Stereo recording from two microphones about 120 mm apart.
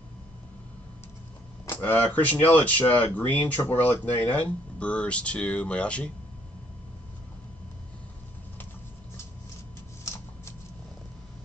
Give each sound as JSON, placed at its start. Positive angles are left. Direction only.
{"t": 1.7, "sound": "speech", "side_deg": 15}
{"t": 10.0, "sound": "shuffling cards", "side_deg": 25}